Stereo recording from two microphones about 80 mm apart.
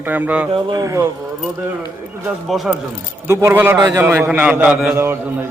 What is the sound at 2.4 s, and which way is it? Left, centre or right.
Speech, centre.